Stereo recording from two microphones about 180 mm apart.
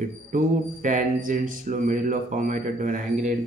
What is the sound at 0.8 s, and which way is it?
Speech, 45° right (ahead or behind).